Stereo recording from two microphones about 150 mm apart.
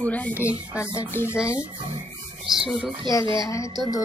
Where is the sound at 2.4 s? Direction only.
5° right (ahead or behind).